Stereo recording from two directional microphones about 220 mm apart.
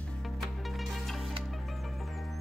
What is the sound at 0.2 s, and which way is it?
Music, centre (ahead or behind).